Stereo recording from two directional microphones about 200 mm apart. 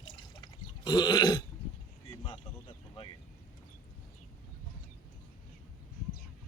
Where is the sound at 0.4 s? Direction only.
20° left (ahead or behind).